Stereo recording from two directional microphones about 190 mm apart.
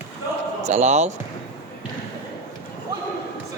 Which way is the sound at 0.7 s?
40° right (ahead or behind).